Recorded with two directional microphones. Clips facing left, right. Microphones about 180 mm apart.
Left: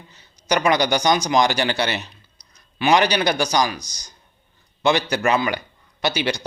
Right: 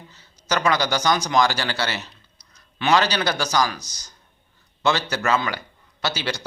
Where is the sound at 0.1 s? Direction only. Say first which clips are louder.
Left 3 dB; 15° left (ahead or behind).